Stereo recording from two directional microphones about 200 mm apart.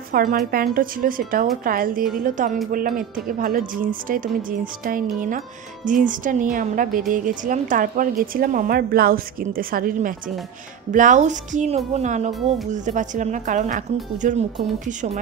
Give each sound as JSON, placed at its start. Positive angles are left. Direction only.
{"t": 0.1, "sound": "a woman's voice", "side_deg": -45}